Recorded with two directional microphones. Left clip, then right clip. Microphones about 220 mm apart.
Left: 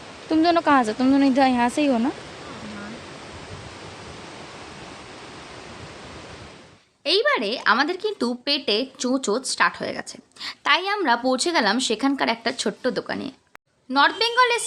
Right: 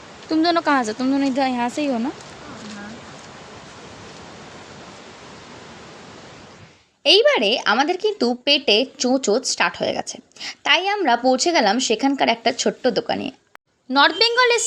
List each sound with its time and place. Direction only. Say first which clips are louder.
0.3 s speech: even; centre (ahead or behind)
7.0 s speech: right 6 dB; 15° right (ahead or behind)